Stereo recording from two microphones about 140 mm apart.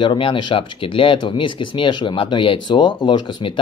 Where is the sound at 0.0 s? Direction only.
35° left (ahead or behind).